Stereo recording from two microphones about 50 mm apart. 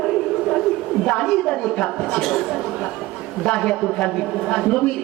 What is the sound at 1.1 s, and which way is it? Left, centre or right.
Speech, centre.